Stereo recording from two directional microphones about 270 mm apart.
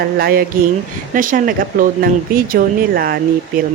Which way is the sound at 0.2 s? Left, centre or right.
Right.